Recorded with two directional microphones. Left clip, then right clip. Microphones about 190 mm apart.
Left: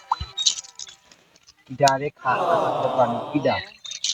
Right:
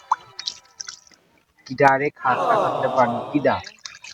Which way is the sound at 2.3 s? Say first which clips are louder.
Left 1 dB; centre (ahead or behind).